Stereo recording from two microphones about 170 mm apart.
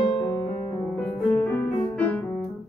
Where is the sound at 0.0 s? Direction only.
25° left (ahead or behind).